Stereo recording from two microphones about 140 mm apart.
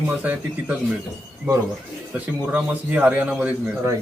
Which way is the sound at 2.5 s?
10° right (ahead or behind).